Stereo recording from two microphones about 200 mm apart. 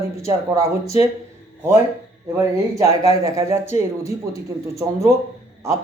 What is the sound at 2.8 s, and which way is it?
Speech, 15° right (ahead or behind).